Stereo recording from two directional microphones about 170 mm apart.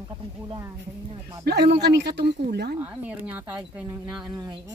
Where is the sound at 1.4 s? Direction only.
70° right (ahead or behind).